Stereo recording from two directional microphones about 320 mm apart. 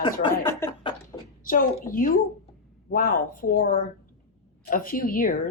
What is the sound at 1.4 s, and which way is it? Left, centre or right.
Speech, left.